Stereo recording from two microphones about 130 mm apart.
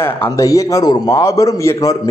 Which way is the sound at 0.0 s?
20° left (ahead or behind).